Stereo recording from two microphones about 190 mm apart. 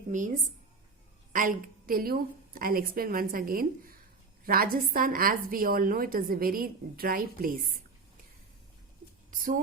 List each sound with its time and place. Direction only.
0.1 s a woman's voice: 40° right (ahead or behind)
9.3 s a woman's voice: 45° right (ahead or behind)